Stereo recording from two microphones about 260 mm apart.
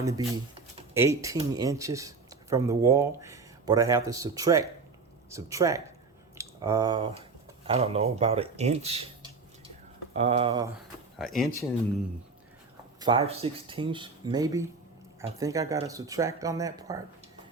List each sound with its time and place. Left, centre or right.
0.2 s speech: centre
11.2 s speech: centre
13.0 s speech: centre